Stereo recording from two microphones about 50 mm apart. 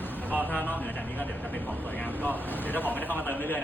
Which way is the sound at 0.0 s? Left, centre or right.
Left.